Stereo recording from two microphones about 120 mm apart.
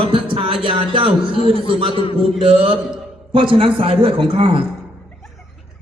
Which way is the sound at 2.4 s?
50° right (ahead or behind).